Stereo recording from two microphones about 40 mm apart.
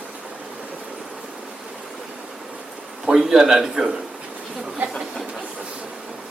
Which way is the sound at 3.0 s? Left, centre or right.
Centre.